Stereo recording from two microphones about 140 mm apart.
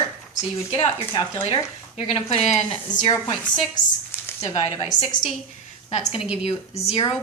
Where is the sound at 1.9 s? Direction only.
45° left (ahead or behind).